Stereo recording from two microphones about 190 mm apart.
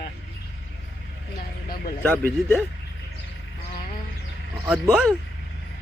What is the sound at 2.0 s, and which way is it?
Speech, 10° left (ahead or behind).